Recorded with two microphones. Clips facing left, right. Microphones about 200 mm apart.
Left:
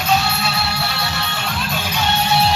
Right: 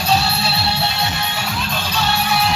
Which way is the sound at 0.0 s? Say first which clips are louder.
Even; 35° right (ahead or behind).